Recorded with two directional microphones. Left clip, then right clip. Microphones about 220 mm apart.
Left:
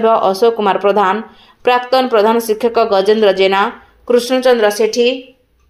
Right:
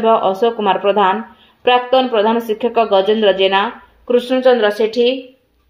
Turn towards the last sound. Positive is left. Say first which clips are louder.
# left 1 dB
turn(degrees=35)  # may be behind; listen again after turning